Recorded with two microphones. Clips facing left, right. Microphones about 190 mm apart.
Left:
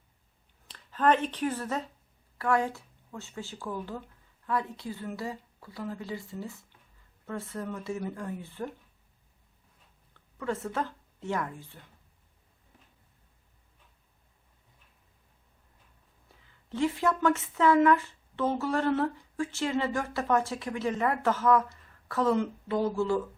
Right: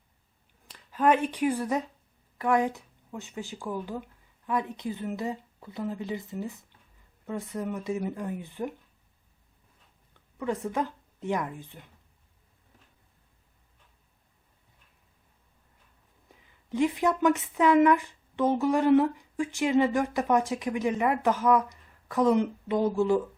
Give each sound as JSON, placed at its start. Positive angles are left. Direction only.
{"t": 0.7, "sound": "speech", "side_deg": -10}
{"t": 10.2, "sound": "a woman's voice", "side_deg": -15}
{"t": 16.3, "sound": "speech", "side_deg": -15}